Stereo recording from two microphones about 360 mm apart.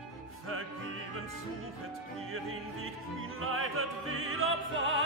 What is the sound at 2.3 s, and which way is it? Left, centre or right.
Opera, right.